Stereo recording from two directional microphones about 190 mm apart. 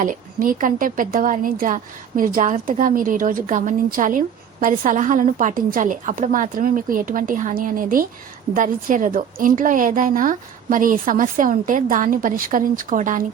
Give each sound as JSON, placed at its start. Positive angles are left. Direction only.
{"t": 0.0, "sound": "a woman's voice", "side_deg": -45}